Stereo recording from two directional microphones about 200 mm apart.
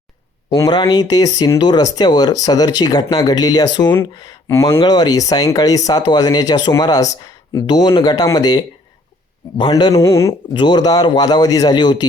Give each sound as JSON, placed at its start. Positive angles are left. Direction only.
{"t": 0.5, "sound": "speech", "side_deg": 20}